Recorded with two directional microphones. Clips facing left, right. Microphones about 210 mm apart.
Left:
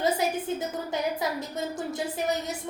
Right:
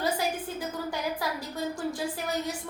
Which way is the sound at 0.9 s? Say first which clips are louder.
Left 4 dB; 20° left (ahead or behind).